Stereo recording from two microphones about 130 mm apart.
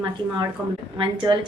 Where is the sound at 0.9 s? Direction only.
40° right (ahead or behind).